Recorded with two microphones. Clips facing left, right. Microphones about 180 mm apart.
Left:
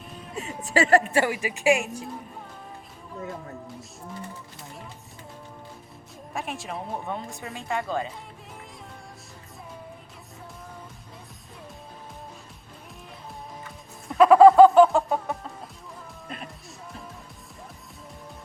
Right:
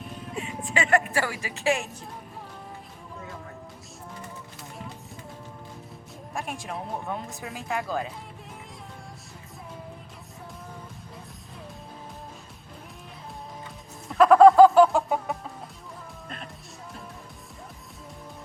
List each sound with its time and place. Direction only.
0.3 s speech: 40° left (ahead or behind); by 2.0 s 15° left (ahead or behind)
6.3 s speech: centre (ahead or behind)
14.1 s chicken: 5° left (ahead or behind)
16.3 s music: 5° left (ahead or behind)